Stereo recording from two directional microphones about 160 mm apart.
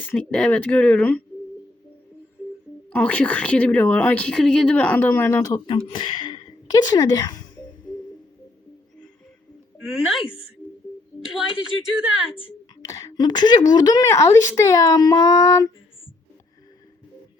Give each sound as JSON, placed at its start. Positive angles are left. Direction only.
{"t": 0.1, "sound": "a woman's voice", "side_deg": 5}
{"t": 2.9, "sound": "a woman's voice", "side_deg": 10}
{"t": 5.6, "sound": "speech", "side_deg": 30}
{"t": 9.9, "sound": "a woman's voice", "side_deg": 0}
{"t": 12.8, "sound": "a woman's voice", "side_deg": 20}